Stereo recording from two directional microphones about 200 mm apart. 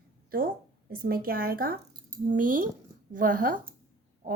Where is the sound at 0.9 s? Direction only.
50° right (ahead or behind).